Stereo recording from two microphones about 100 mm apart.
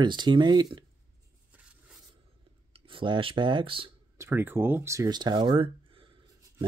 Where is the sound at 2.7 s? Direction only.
60° right (ahead or behind).